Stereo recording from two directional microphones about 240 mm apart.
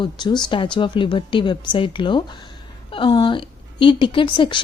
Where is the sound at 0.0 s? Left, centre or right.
Centre.